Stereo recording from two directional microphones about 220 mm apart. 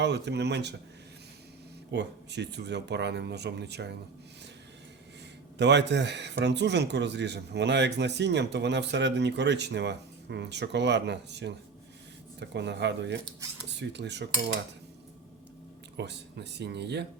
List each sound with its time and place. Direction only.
0.0 s speech: 50° right (ahead or behind)
1.9 s speech: 50° right (ahead or behind)
5.5 s speech: 50° right (ahead or behind)
16.0 s speech: 50° right (ahead or behind)